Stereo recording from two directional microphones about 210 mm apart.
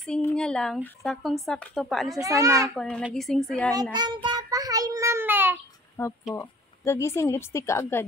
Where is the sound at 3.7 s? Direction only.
20° right (ahead or behind).